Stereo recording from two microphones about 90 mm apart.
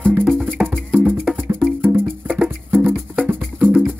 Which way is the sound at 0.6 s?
20° right (ahead or behind).